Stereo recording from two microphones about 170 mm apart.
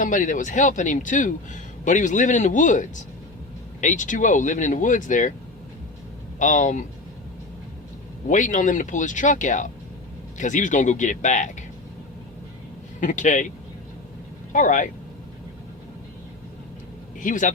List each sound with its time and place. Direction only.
0.0 s speech: 50° left (ahead or behind)
6.4 s speech: 50° left (ahead or behind)
8.3 s speech: 45° left (ahead or behind)
13.0 s speech: 45° left (ahead or behind)
14.5 s speech: 50° left (ahead or behind)
17.2 s speech: 50° left (ahead or behind)